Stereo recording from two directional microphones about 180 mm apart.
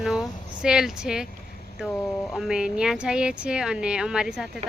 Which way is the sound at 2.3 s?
5° right (ahead or behind).